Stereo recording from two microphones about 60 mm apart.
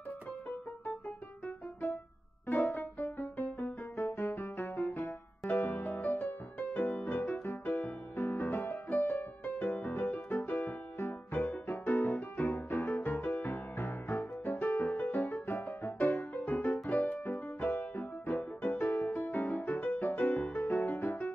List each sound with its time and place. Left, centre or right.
2.4 s music: left